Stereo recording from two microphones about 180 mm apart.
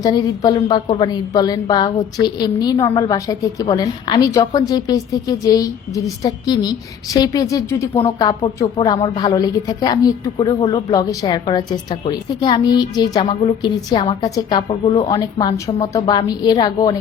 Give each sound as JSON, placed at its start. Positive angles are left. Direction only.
{"t": 0.0, "sound": "a woman's voice", "side_deg": 20}